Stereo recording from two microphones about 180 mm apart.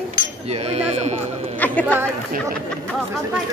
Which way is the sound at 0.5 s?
35° right (ahead or behind).